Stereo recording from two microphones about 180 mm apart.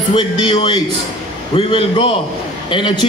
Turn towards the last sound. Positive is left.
turn(degrees=25)  # may be behind; listen again after turning